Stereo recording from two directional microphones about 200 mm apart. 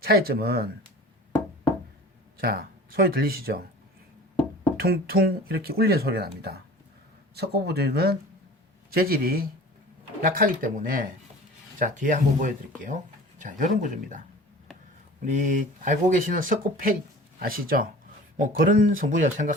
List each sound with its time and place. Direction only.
0.0 s speech: 50° right (ahead or behind)
2.4 s speech: 50° right (ahead or behind)
4.8 s speech: 50° right (ahead or behind)
15.4 s speech: 40° right (ahead or behind)